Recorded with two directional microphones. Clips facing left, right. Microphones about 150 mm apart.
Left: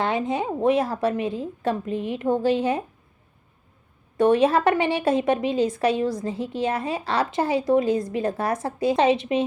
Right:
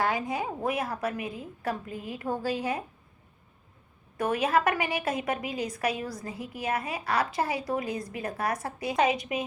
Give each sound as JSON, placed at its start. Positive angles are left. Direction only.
{"t": 0.0, "sound": "a woman's voice", "side_deg": 25}
{"t": 4.2, "sound": "a woman's voice", "side_deg": 25}